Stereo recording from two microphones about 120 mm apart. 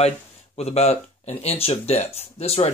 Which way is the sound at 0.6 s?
65° left (ahead or behind).